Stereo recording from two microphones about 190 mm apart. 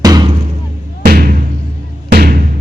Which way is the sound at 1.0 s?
50° right (ahead or behind).